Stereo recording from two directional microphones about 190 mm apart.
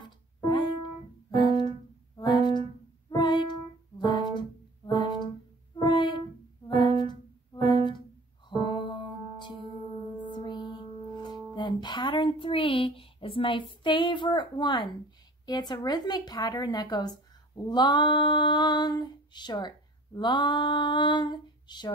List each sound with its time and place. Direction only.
0.0 s music: 25° left (ahead or behind)
15.4 s female singing: 20° left (ahead or behind)